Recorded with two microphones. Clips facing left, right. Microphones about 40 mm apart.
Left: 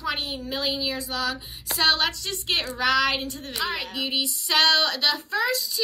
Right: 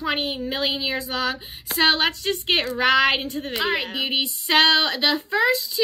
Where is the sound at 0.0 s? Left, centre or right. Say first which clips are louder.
Right 4 dB; right.